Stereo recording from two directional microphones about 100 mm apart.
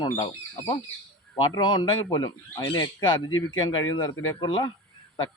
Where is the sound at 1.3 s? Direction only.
50° left (ahead or behind).